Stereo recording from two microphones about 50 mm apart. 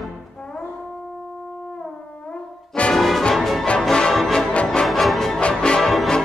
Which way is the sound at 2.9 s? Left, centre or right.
Centre.